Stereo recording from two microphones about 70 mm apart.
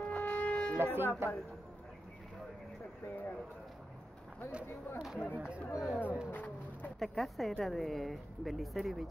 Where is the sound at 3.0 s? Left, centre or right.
Left.